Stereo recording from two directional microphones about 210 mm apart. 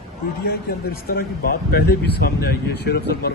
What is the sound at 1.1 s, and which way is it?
Speech, 45° left (ahead or behind).